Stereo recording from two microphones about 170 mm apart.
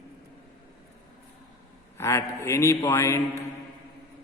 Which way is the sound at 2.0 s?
15° left (ahead or behind).